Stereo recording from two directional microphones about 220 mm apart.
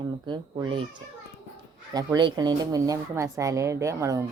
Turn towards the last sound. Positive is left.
turn(degrees=-15)  # may be behind; listen again after turning